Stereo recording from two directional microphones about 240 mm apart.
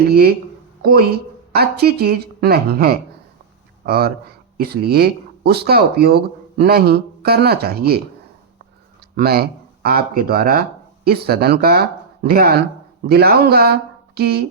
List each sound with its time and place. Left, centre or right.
0.0 s a woman's voice: right
9.1 s a woman's voice: right